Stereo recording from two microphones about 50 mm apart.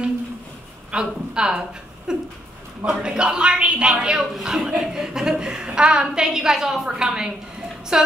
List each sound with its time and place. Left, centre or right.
0.9 s a woman's voice: centre